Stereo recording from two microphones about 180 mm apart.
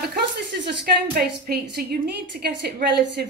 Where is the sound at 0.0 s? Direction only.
65° right (ahead or behind).